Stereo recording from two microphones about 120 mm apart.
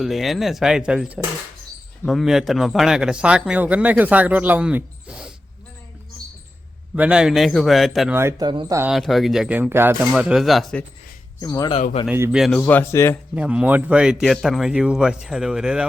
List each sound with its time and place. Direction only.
0.0 s speech: centre (ahead or behind)
6.9 s speech: 10° right (ahead or behind)
8.1 s speech: 20° right (ahead or behind)
8.4 s speech: 35° right (ahead or behind)
8.9 s speech: centre (ahead or behind)
9.5 s speech: 15° right (ahead or behind)
10.1 s speech: 5° right (ahead or behind)
11.3 s speech: 30° left (ahead or behind)
12.0 s a man's voice: 55° left (ahead or behind)
12.3 s speech: centre (ahead or behind)
12.6 s speech: 15° left (ahead or behind)
13.3 s speech: 10° right (ahead or behind)